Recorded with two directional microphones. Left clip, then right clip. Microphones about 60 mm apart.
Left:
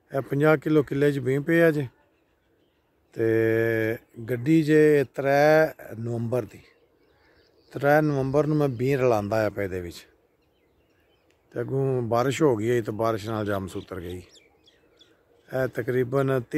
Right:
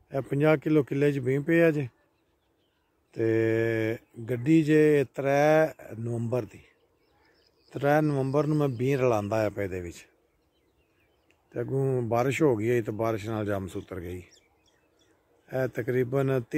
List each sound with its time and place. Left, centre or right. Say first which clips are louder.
0.1 s mantra: left 3 dB; centre
3.1 s mantra: left 3 dB; centre
11.4 s mantra: left 2 dB; centre
14.3 s chicken: left 6 dB; right
15.4 s mantra: left 3 dB; centre